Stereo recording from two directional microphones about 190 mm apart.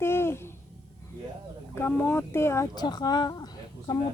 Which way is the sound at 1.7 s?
10° left (ahead or behind).